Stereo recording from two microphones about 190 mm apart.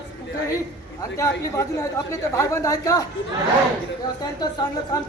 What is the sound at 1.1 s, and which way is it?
Speech, 15° left (ahead or behind).